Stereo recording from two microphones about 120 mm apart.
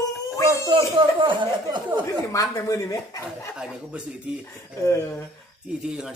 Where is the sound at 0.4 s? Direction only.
30° right (ahead or behind).